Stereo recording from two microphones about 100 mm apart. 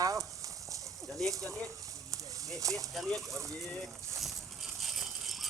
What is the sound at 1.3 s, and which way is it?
Speech, 35° right (ahead or behind).